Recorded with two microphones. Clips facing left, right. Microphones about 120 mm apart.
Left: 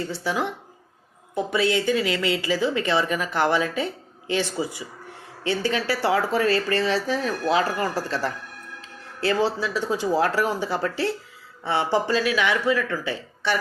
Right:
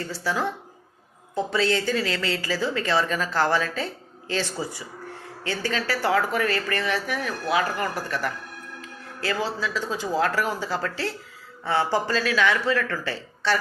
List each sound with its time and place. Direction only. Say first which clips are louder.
0.0 s speech: left 1 dB; 20° left (ahead or behind)